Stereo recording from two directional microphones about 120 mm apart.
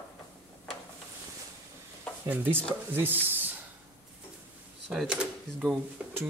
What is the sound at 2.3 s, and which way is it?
Speech, 15° right (ahead or behind).